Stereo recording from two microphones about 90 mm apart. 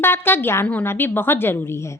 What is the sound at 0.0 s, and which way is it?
A woman's voice, 25° left (ahead or behind).